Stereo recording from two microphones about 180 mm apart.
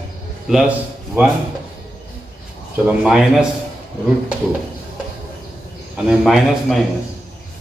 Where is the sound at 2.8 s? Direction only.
5° right (ahead or behind).